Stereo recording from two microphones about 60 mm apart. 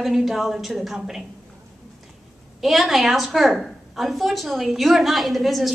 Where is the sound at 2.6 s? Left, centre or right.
Centre.